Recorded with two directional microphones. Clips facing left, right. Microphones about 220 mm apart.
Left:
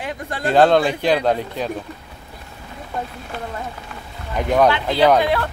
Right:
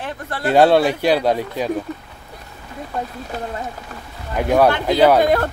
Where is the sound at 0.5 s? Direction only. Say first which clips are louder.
Right 1 dB; 10° right (ahead or behind).